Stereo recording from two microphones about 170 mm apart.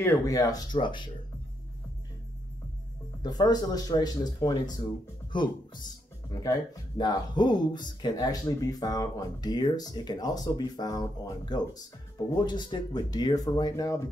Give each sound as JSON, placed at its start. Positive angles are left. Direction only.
{"t": 0.0, "sound": "speech", "side_deg": 20}
{"t": 3.2, "sound": "speech", "side_deg": 25}
{"t": 7.0, "sound": "speech", "side_deg": 25}